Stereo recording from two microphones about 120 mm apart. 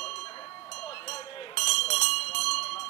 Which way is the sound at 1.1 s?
60° left (ahead or behind).